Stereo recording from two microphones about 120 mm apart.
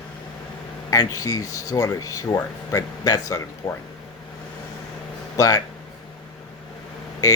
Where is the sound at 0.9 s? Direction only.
30° left (ahead or behind).